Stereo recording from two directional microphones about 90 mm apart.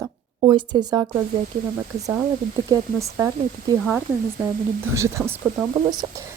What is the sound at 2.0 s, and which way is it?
Speech, 40° right (ahead or behind).